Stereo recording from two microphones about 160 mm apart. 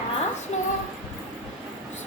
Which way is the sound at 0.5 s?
45° left (ahead or behind).